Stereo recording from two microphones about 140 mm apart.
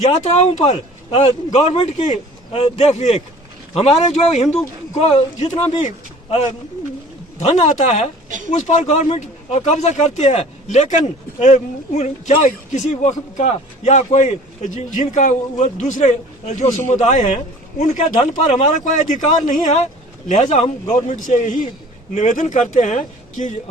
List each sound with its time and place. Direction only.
0.0 s speech: 55° left (ahead or behind)
2.5 s speech: 45° left (ahead or behind)
7.3 s speech: 55° left (ahead or behind)
9.0 s speech: 45° left (ahead or behind); by 23.6 s 65° left (ahead or behind)